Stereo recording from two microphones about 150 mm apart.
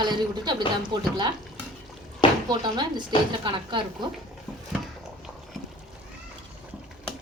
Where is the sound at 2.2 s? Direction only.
35° left (ahead or behind).